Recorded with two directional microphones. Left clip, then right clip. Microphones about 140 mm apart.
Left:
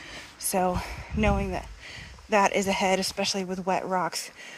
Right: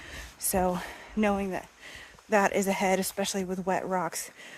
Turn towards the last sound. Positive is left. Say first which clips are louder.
# left 3 dB
turn(degrees=-20)  # may be behind; listen again after turning